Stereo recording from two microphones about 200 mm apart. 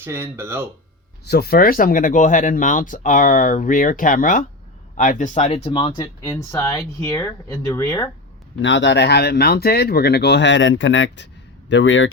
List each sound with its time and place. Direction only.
0.0 s speech: 10° right (ahead or behind)
1.3 s speech: 50° left (ahead or behind); by 8.1 s 20° left (ahead or behind)
8.6 s speech: 65° left (ahead or behind)